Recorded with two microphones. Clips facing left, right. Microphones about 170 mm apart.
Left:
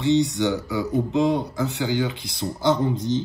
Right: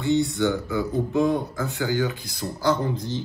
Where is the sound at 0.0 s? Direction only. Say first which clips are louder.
Left 2 dB; 20° left (ahead or behind).